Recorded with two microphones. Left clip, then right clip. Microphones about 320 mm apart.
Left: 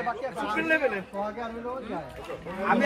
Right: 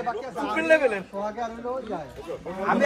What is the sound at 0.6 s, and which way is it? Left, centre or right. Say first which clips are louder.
Speech: right 5 dB; centre.